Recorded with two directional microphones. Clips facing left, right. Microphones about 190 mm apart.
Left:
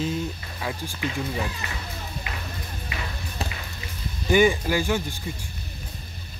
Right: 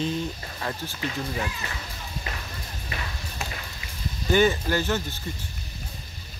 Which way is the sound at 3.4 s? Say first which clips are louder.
Left 3 dB; 35° left (ahead or behind).